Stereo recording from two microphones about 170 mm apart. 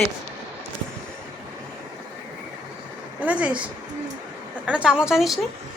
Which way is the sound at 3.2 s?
10° right (ahead or behind).